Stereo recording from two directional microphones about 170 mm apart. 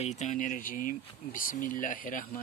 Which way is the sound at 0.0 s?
45° left (ahead or behind).